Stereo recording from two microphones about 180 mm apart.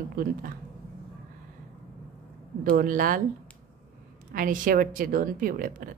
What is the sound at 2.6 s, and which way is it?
Speech, 50° right (ahead or behind).